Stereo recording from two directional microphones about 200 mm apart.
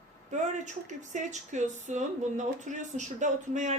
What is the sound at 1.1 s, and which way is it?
Speech, 35° right (ahead or behind).